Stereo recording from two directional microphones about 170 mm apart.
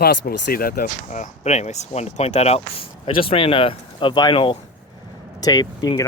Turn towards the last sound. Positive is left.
turn(degrees=20)  # may be behind; listen again after turning